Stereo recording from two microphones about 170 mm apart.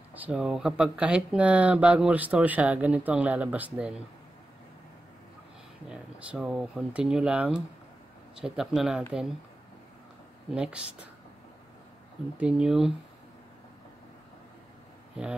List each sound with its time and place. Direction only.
0.1 s speech: 5° right (ahead or behind)
5.9 s speech: 5° right (ahead or behind)
10.5 s speech: 5° right (ahead or behind)
12.4 s speech: 5° right (ahead or behind)